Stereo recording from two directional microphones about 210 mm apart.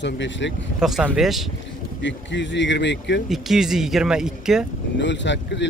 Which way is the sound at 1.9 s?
60° left (ahead or behind).